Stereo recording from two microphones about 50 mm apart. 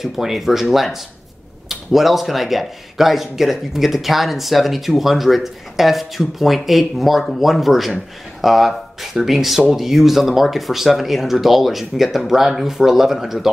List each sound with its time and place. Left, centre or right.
0.0 s speech: centre